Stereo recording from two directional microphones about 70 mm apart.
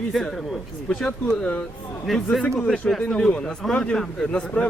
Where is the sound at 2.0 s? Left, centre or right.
Centre.